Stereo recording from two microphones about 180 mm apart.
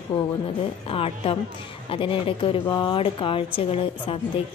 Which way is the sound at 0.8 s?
30° left (ahead or behind).